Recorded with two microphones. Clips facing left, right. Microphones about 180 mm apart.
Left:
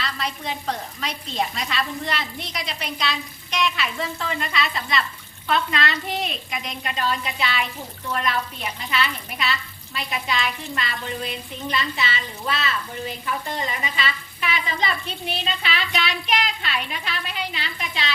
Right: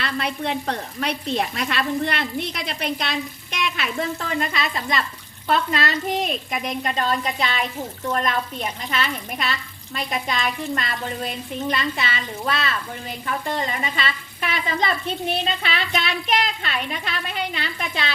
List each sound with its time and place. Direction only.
0.0 s speech: 60° right (ahead or behind)
13.5 s speech: 50° right (ahead or behind)